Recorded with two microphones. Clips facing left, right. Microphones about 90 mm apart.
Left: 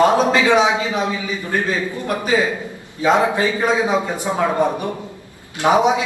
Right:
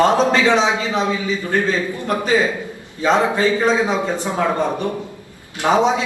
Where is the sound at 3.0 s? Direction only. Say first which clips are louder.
Even; 15° left (ahead or behind).